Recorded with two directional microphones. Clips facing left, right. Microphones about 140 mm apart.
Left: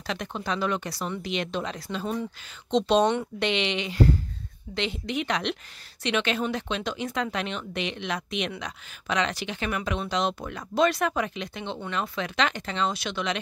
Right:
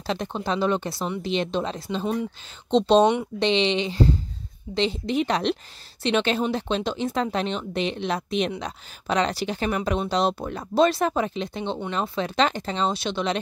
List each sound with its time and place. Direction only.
0.0 s speech: 30° right (ahead or behind)